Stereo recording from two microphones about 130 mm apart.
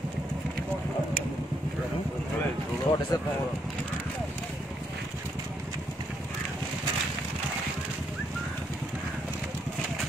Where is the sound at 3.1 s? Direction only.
30° left (ahead or behind).